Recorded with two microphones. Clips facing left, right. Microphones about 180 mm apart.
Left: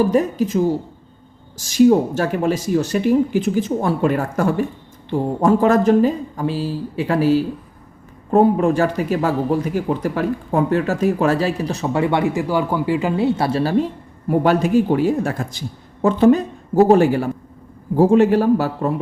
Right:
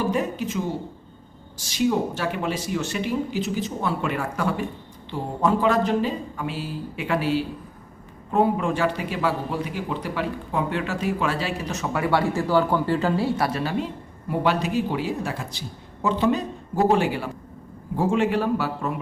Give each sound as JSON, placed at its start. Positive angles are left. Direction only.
{"t": 0.1, "sound": "a man's voice", "side_deg": 40}
{"t": 14.3, "sound": "a man's voice", "side_deg": 45}